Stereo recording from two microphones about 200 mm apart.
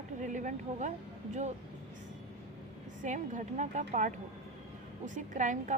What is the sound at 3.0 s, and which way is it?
A woman's voice, 40° right (ahead or behind).